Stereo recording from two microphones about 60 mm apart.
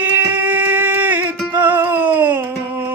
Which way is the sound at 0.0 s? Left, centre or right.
Right.